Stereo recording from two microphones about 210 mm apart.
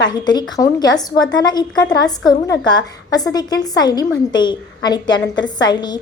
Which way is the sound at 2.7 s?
20° left (ahead or behind).